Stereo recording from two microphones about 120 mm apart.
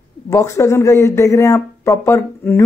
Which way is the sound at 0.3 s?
25° left (ahead or behind).